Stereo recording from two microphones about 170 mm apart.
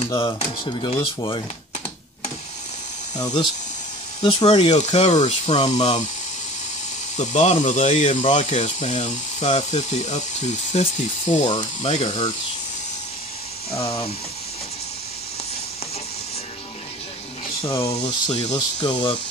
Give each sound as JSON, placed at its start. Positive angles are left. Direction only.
{"t": 0.1, "sound": "speech", "side_deg": 25}
{"t": 4.2, "sound": "speech", "side_deg": 25}
{"t": 4.5, "sound": "speech", "side_deg": 40}
{"t": 7.2, "sound": "speech", "side_deg": 40}
{"t": 17.8, "sound": "speech", "side_deg": 25}